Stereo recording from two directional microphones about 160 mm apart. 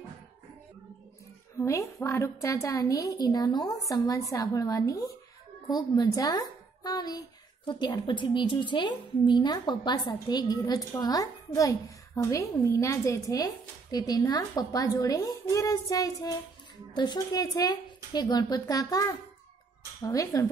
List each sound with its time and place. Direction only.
1.6 s a woman's voice: 20° left (ahead or behind)